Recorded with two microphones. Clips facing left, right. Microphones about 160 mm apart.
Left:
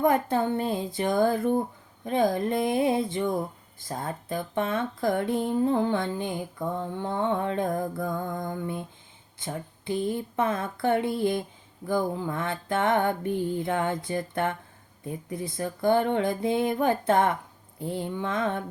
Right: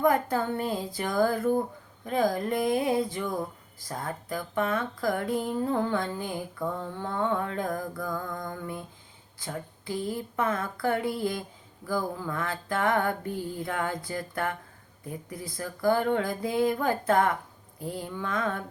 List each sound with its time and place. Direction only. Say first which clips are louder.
0.0 s speech: left 2 dB; 25° left (ahead or behind)